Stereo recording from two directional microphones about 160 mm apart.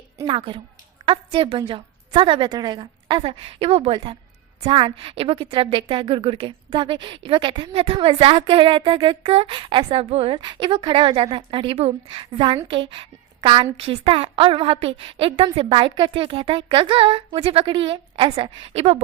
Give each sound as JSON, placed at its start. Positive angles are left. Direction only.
{"t": 0.3, "sound": "a woman's voice", "side_deg": -30}